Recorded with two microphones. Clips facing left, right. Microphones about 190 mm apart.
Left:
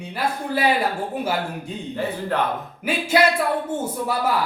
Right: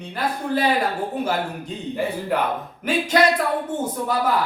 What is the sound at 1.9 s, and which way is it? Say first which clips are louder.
Speech: right 1 dB; 10° right (ahead or behind).